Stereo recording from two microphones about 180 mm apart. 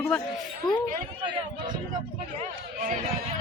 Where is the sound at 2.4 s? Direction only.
45° right (ahead or behind).